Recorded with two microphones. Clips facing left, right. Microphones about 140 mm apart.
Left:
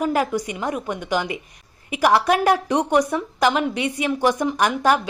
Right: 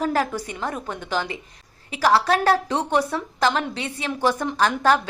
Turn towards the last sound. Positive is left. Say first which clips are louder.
# left 1 dB
turn(degrees=10)  # may be behind; listen again after turning